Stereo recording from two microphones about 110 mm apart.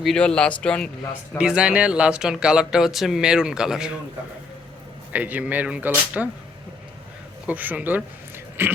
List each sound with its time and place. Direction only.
0.0 s speech: 5° left (ahead or behind)
1.4 s speech: 10° right (ahead or behind)
5.1 s speech: 15° right (ahead or behind)
7.4 s speech: 15° right (ahead or behind)
8.6 s a sound: 20° right (ahead or behind)